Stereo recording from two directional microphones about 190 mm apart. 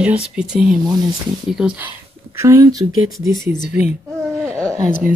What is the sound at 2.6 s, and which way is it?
Speech, 20° right (ahead or behind).